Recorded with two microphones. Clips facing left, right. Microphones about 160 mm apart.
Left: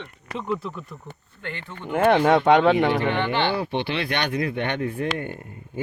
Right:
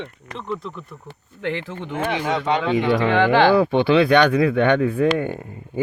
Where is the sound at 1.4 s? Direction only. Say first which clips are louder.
Right 9 dB; 90° right.